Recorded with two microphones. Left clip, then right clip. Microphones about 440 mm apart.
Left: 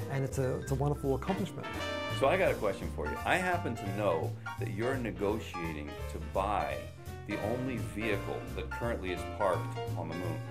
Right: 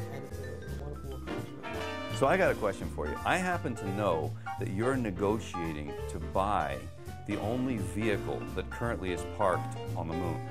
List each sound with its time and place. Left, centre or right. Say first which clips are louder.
1.8 s speech: left 2 dB; centre
2.1 s speech: right 2 dB; right